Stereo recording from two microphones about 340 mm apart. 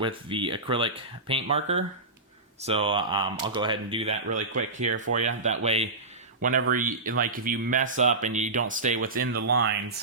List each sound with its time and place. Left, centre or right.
0.0 s speech: centre
4.3 s speech: right
4.8 s speech: right
9.4 s speech: right